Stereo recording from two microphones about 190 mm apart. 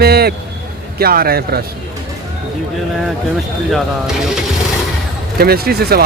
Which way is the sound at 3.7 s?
Centre (ahead or behind).